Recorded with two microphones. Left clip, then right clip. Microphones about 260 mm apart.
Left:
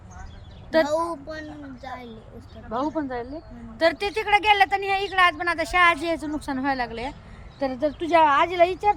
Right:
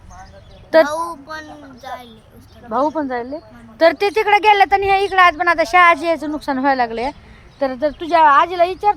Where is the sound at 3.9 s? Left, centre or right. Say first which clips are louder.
Right 7 dB; centre.